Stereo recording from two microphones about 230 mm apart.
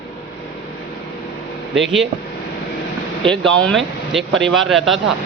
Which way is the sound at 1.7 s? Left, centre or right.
Centre.